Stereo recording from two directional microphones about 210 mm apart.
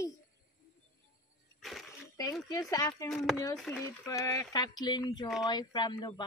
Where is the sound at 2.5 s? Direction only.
15° left (ahead or behind).